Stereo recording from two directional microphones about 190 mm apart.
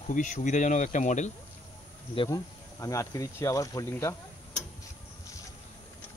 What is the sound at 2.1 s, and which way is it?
Speech, 20° left (ahead or behind).